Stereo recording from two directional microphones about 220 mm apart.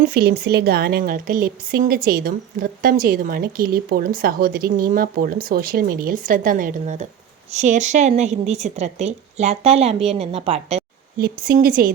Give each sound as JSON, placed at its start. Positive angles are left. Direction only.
{"t": 0.0, "sound": "speech", "side_deg": -45}
{"t": 11.2, "sound": "speech", "side_deg": -40}